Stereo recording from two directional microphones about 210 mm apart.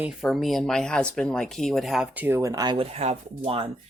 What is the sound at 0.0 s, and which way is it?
Speech, centre (ahead or behind).